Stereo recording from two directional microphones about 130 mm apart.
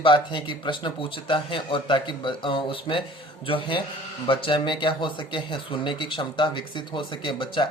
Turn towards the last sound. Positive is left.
turn(degrees=40)  # may be behind; listen again after turning